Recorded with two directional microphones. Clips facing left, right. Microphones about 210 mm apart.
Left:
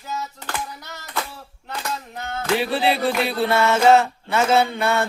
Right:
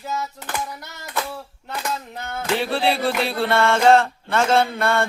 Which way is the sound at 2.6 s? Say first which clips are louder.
Even; 5° left (ahead or behind).